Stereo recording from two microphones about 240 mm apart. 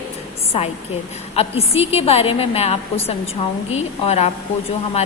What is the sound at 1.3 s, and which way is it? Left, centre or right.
A woman's voice, left.